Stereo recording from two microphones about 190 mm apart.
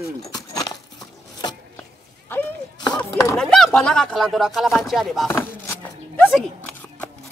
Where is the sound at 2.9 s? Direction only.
15° left (ahead or behind).